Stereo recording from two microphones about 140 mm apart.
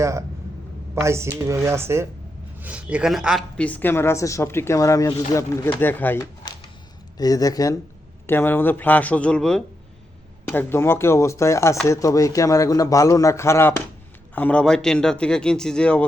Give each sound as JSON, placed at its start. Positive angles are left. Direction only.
{"t": 0.0, "sound": "speech", "side_deg": -20}
{"t": 3.6, "sound": "speech", "side_deg": 10}
{"t": 5.8, "sound": "speech", "side_deg": 15}
{"t": 6.4, "sound": "a sound", "side_deg": 30}
{"t": 7.2, "sound": "speech", "side_deg": 25}
{"t": 8.3, "sound": "speech", "side_deg": 15}